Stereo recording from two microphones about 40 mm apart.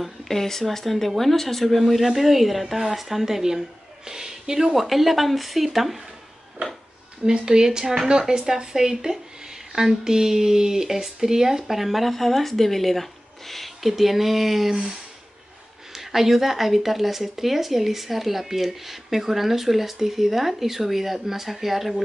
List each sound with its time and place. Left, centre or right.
0.0 s speech: centre
4.7 s speech: centre
7.2 s speech: centre